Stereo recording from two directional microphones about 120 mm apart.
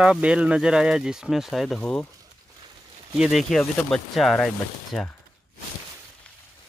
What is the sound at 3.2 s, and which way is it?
Speech, centre (ahead or behind).